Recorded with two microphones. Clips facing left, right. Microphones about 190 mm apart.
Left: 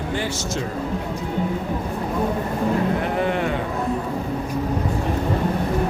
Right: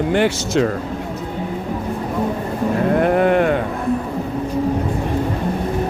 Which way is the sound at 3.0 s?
55° right (ahead or behind).